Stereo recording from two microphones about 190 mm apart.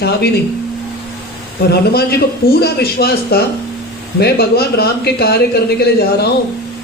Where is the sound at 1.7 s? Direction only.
55° left (ahead or behind).